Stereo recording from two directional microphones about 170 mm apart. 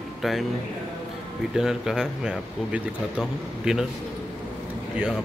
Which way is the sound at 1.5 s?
5° right (ahead or behind).